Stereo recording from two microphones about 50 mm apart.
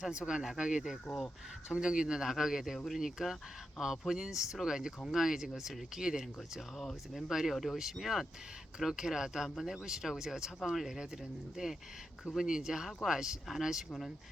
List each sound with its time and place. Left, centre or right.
0.1 s speech: centre
1.0 s speech: centre
1.7 s speech: centre
2.7 s speech: centre
3.0 s speech: centre
6.7 s speech: centre